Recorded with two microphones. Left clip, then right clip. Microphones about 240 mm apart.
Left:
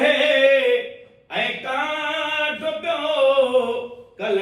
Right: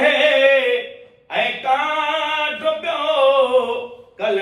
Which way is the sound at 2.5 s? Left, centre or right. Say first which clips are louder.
Right 3 dB; centre.